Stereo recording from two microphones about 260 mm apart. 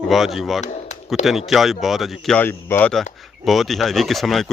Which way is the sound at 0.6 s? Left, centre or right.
Left.